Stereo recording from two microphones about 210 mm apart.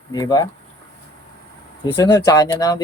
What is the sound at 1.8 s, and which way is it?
Speech, 20° left (ahead or behind).